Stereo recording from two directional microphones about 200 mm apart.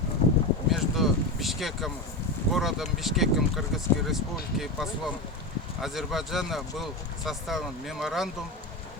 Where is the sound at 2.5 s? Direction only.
Centre (ahead or behind).